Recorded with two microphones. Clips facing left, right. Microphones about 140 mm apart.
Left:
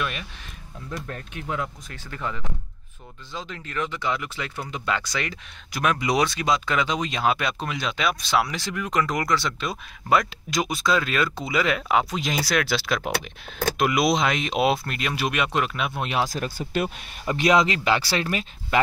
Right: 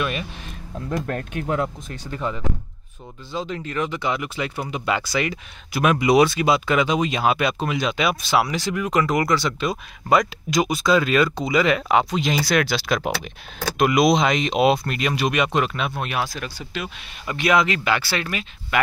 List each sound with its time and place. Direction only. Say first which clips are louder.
0.8 s speech: right 8 dB; 55° right (ahead or behind)
1.9 s speech: right 5 dB; 20° right (ahead or behind); by 16.0 s 5° left (ahead or behind)
16.0 s speech: left 2 dB; 20° left (ahead or behind)
16.3 s speech: left 3 dB; 45° left (ahead or behind)
17.3 s speech: even; 30° left (ahead or behind)